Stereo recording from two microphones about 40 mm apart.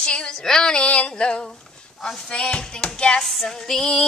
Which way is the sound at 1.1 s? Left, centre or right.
Left.